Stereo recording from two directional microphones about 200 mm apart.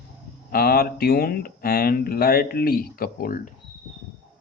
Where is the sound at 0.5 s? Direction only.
50° left (ahead or behind).